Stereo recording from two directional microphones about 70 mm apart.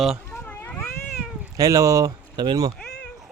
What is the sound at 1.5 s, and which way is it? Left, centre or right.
Speech, right.